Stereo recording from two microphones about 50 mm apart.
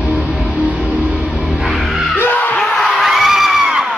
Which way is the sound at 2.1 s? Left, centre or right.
Left.